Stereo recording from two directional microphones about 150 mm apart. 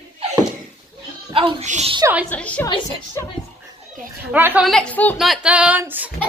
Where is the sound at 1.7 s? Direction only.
50° right (ahead or behind).